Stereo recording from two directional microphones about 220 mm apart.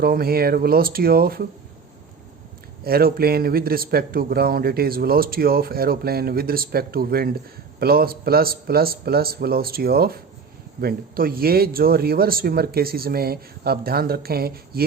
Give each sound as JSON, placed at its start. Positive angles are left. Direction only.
{"t": 0.0, "sound": "a man's voice", "side_deg": -45}
{"t": 2.8, "sound": "a man's voice", "side_deg": -45}